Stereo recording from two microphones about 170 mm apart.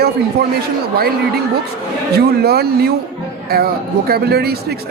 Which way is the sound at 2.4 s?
70° right (ahead or behind).